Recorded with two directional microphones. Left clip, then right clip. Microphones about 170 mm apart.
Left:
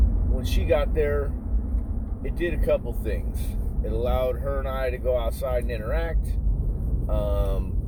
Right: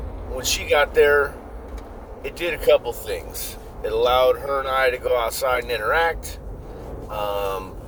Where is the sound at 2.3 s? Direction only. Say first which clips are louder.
Right 7 dB; 15° right (ahead or behind).